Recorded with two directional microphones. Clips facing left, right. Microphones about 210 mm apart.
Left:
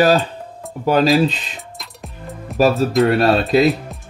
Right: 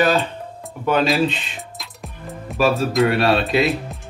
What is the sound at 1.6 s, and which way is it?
Music, centre (ahead or behind).